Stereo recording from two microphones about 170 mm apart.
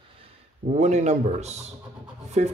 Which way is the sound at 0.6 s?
45° right (ahead or behind).